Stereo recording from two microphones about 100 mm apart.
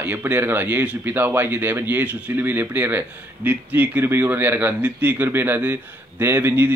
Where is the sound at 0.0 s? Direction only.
20° right (ahead or behind).